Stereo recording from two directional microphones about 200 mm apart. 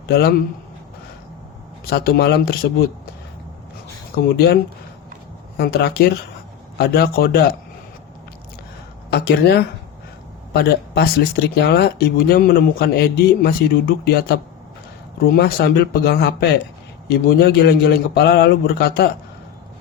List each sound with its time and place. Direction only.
0.1 s speech: 50° left (ahead or behind)
1.9 s speech: 50° left (ahead or behind)
4.4 s speech: 50° left (ahead or behind)
9.0 s speech: 55° left (ahead or behind)